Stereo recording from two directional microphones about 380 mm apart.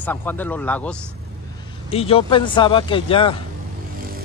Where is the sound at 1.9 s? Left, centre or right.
Centre.